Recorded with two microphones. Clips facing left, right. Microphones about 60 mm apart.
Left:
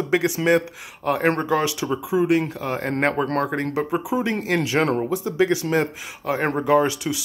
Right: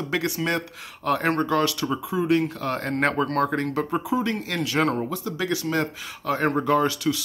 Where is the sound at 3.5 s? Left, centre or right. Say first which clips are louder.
Left 1 dB; centre.